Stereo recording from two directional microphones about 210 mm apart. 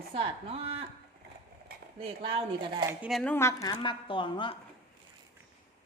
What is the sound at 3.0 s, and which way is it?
A woman's voice, centre (ahead or behind).